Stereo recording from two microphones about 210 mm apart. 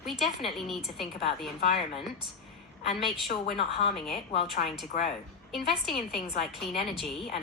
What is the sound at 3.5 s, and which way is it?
Speech, 25° left (ahead or behind).